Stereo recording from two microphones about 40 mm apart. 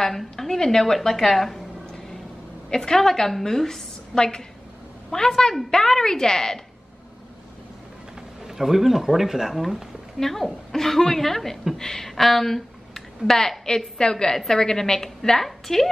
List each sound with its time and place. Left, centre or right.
0.0 s a woman's voice: centre
2.7 s a woman's voice: centre
4.1 s a woman's voice: centre
8.5 s speech: centre
10.1 s a woman's voice: centre